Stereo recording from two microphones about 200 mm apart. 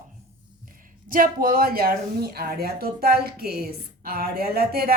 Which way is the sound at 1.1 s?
45° right (ahead or behind).